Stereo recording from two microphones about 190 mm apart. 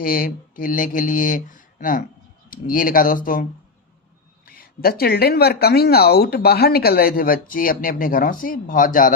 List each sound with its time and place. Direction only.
0.0 s speech: 50° left (ahead or behind)
4.4 s speech: 50° left (ahead or behind)